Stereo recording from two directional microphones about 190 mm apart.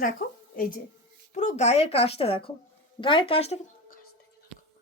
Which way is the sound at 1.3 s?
35° left (ahead or behind).